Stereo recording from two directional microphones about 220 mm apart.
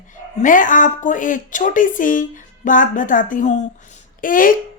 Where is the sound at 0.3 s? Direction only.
35° left (ahead or behind).